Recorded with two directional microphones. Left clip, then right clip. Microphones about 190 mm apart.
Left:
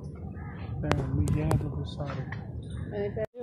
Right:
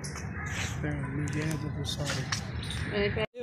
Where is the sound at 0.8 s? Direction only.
45° left (ahead or behind).